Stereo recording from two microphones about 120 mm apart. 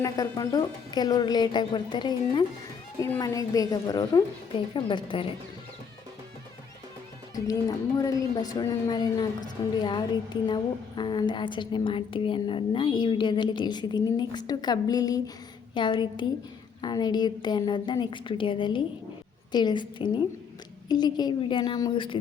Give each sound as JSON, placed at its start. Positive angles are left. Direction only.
{"t": 0.0, "sound": "speech", "side_deg": 30}
{"t": 4.5, "sound": "a woman's voice", "side_deg": 45}
{"t": 7.3, "sound": "a woman's voice", "side_deg": 30}